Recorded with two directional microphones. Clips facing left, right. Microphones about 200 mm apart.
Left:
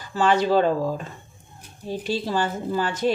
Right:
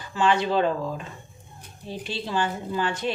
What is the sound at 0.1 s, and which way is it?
Speech, 40° left (ahead or behind).